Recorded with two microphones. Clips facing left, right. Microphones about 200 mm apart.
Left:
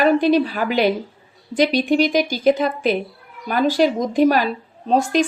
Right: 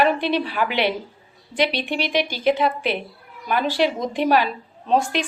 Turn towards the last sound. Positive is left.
turn(degrees=40)  # may be behind; listen again after turning